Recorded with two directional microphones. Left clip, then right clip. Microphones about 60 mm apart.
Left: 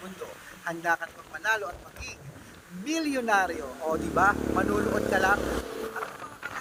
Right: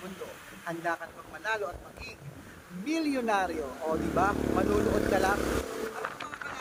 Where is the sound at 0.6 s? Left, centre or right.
Right.